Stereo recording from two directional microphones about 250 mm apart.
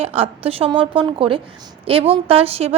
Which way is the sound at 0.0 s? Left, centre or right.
Right.